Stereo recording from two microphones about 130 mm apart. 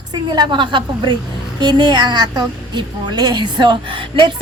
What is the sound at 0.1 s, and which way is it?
A woman's voice, 35° right (ahead or behind).